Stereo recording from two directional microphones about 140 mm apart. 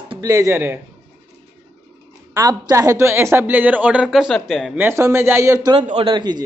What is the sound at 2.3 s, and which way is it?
A woman's voice, 25° right (ahead or behind).